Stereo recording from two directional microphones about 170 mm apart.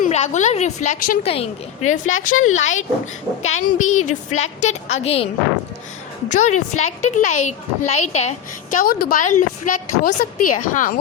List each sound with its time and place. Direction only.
0.0 s a woman's voice: 40° left (ahead or behind)
1.2 s a woman's voice: 35° left (ahead or behind)
8.8 s a woman's voice: 60° left (ahead or behind)